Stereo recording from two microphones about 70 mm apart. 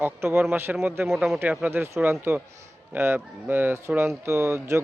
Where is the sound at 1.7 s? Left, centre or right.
Right.